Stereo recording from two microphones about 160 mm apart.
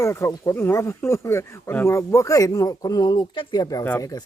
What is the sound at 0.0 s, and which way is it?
Speech, 15° left (ahead or behind).